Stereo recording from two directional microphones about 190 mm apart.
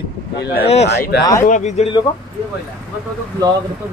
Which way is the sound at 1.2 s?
15° left (ahead or behind).